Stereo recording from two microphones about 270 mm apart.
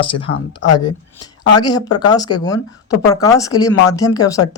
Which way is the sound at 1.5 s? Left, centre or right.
Centre.